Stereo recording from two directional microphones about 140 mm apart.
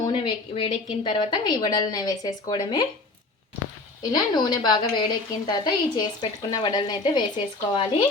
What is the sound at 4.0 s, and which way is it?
Speech, 30° left (ahead or behind).